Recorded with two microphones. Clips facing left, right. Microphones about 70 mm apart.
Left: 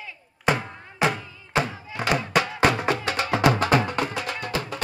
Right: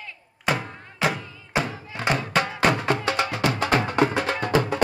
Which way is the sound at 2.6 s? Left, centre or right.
Centre.